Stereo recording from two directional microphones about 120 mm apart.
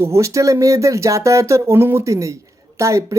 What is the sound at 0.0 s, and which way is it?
Speech, 25° right (ahead or behind).